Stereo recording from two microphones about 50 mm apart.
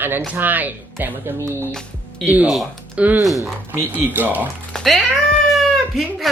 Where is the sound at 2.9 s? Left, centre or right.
Right.